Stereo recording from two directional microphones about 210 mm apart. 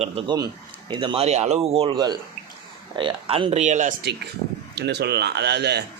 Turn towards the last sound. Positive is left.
turn(degrees=-55)  # may be behind; listen again after turning